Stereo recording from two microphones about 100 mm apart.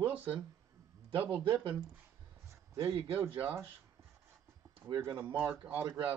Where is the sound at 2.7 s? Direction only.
65° right (ahead or behind).